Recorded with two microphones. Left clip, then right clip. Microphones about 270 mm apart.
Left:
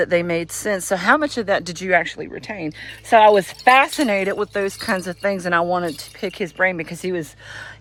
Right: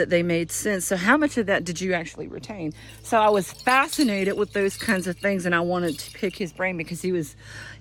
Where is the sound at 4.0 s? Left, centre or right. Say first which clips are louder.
Left 4 dB; centre.